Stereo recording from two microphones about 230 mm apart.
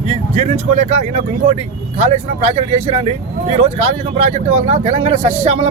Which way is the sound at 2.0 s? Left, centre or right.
Right.